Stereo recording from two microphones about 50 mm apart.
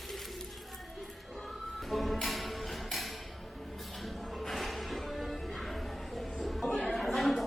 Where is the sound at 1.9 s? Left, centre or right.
Centre.